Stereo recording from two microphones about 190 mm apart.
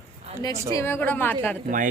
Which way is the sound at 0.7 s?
15° left (ahead or behind).